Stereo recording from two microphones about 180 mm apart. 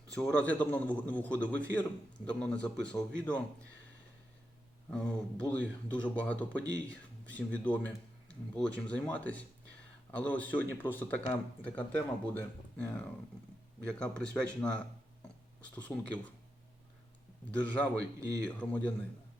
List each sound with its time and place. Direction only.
0.1 s a man's voice: 5° left (ahead or behind)
4.9 s speech: 5° left (ahead or behind)
17.5 s speech: 5° left (ahead or behind)